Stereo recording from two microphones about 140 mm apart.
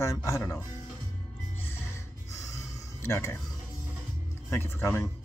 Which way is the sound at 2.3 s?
20° left (ahead or behind).